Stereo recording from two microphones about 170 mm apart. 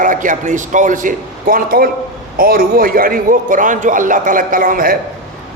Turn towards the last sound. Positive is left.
turn(degrees=-55)  # may be behind; listen again after turning